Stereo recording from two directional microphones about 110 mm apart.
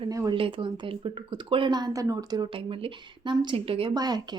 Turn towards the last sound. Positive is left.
turn(degrees=-35)  # may be behind; listen again after turning